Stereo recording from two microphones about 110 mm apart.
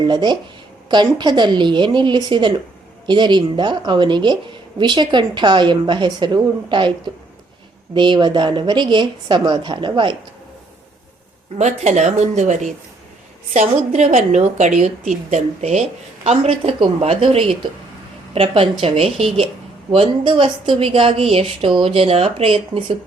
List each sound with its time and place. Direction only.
0.0 s a woman's voice: 40° right (ahead or behind)
11.5 s a woman's voice: 90° right; by 19.5 s 65° right (ahead or behind)
19.9 s a woman's voice: 55° right (ahead or behind)